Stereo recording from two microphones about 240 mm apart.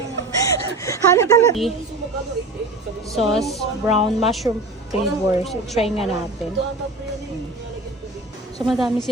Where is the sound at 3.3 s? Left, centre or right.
Centre.